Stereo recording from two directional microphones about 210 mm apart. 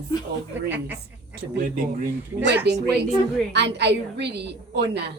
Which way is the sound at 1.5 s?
40° right (ahead or behind).